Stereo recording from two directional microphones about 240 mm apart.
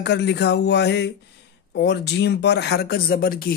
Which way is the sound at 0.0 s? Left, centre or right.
Left.